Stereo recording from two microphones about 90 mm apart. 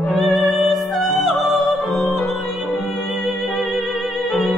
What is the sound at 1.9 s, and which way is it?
Music, centre (ahead or behind).